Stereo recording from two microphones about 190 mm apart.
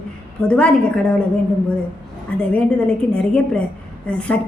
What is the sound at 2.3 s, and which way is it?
A woman's voice, 5° left (ahead or behind).